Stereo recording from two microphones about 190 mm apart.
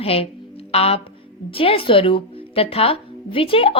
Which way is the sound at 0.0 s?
30° left (ahead or behind).